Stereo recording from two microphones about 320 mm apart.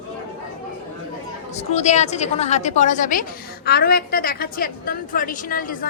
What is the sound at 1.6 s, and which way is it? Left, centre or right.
A woman's voice, left.